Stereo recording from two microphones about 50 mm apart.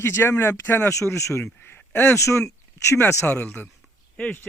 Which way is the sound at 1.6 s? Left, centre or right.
Left.